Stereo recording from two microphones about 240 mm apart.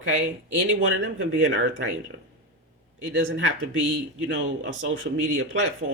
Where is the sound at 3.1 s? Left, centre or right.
Right.